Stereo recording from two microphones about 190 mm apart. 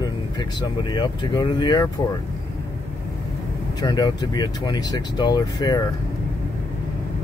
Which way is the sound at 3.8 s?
20° left (ahead or behind).